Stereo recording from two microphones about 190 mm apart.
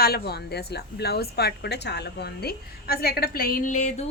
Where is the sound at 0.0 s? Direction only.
55° left (ahead or behind).